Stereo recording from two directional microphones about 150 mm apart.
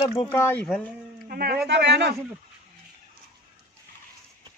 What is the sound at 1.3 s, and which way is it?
Speech, 90° right.